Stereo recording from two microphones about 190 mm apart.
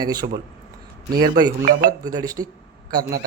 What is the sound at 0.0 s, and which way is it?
Speech, 20° right (ahead or behind).